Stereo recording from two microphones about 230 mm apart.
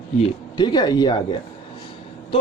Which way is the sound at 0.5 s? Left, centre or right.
Centre.